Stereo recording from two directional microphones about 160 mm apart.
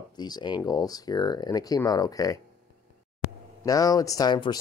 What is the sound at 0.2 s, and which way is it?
Speech, 25° left (ahead or behind).